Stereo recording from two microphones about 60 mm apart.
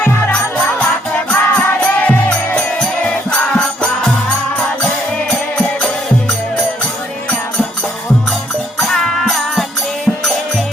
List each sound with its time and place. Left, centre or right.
1.3 s music: left
8.8 s music: centre